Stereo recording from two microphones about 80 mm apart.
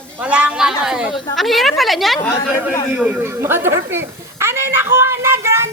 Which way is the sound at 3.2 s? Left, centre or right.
Right.